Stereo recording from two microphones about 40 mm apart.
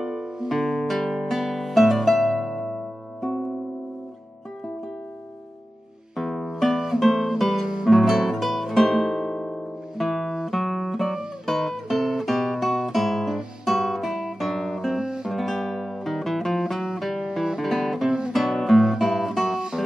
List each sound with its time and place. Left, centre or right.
0.0 s music: centre
6.1 s music: centre
7.6 s music: centre
7.9 s music: centre
12.8 s guitar: centre
15.0 s guitar: centre
15.2 s music: centre
17.6 s guitar: centre
19.5 s music: centre